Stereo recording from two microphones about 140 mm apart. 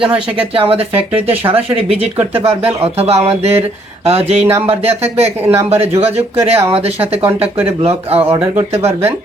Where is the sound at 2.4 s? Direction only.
45° right (ahead or behind).